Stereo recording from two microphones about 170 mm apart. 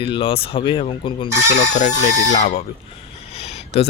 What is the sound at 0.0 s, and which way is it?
Speech, 30° left (ahead or behind).